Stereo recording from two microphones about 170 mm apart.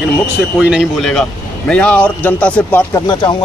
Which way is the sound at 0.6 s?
5° right (ahead or behind).